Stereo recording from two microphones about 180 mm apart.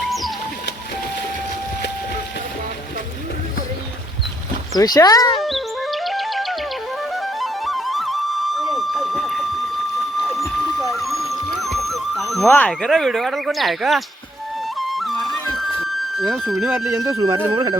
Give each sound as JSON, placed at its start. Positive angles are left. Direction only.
{"t": 0.0, "sound": "bird", "side_deg": 0}
{"t": 4.8, "sound": "speech", "side_deg": 20}
{"t": 5.5, "sound": "music", "side_deg": 0}
{"t": 17.1, "sound": "speech", "side_deg": -20}